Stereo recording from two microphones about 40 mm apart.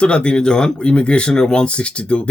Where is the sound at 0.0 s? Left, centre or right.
Left.